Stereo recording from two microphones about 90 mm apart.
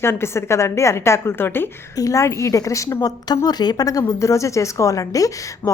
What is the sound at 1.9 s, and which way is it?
A woman's voice, 40° left (ahead or behind).